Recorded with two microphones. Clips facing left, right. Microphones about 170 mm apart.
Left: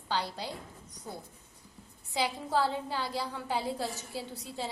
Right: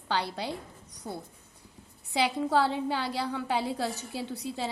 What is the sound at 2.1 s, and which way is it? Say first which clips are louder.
A woman's voice: right 4 dB; 70° right (ahead or behind).